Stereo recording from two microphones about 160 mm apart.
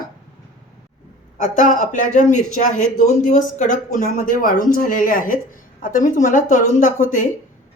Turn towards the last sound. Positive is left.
turn(degrees=50)  # may be behind; listen again after turning